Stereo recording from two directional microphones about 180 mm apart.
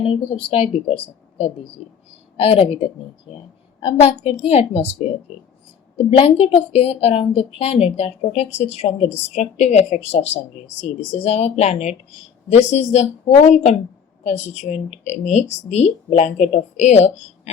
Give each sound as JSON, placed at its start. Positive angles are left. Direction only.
{"t": 0.0, "sound": "a woman's voice", "side_deg": 30}
{"t": 1.8, "sound": "speech", "side_deg": -5}
{"t": 2.4, "sound": "a woman's voice", "side_deg": 30}
{"t": 6.1, "sound": "a woman's voice", "side_deg": 30}